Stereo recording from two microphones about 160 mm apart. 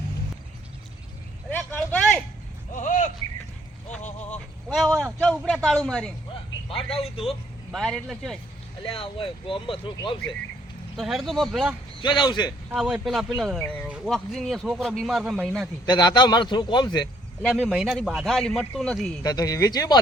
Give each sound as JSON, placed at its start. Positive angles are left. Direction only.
{"t": 1.5, "sound": "a sound", "side_deg": 10}
{"t": 2.7, "sound": "a sound", "side_deg": 50}
{"t": 4.7, "sound": "a man's voice", "side_deg": 0}
{"t": 6.7, "sound": "speech", "side_deg": 35}
{"t": 7.7, "sound": "a man's voice", "side_deg": 0}
{"t": 8.8, "sound": "speech", "side_deg": 35}
{"t": 10.9, "sound": "a man's voice", "side_deg": 0}
{"t": 12.0, "sound": "a man's voice", "side_deg": 30}
{"t": 12.7, "sound": "a man's voice", "side_deg": -5}
{"t": 13.6, "sound": "speech", "side_deg": 10}
{"t": 13.8, "sound": "a man's voice", "side_deg": -5}
{"t": 15.9, "sound": "a man's voice", "side_deg": 25}
{"t": 17.4, "sound": "a man's voice", "side_deg": 5}
{"t": 19.2, "sound": "a man's voice", "side_deg": 20}